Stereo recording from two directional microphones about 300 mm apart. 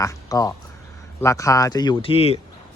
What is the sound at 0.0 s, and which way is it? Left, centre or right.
Speech, centre.